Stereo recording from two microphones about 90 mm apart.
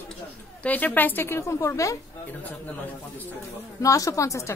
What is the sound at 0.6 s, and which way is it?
A woman's voice, 20° left (ahead or behind).